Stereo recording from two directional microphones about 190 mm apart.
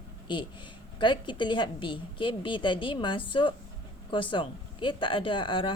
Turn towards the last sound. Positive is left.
turn(degrees=25)  # may be behind; listen again after turning